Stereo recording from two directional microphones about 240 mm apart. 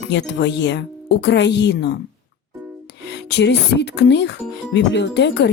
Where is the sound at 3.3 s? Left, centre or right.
Left.